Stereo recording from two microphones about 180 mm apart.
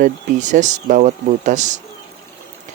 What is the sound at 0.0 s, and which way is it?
Speech, 45° right (ahead or behind).